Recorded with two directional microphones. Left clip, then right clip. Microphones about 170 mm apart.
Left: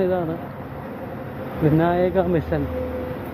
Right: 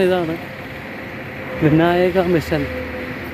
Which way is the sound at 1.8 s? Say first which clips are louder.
Right 4 dB; 25° right (ahead or behind).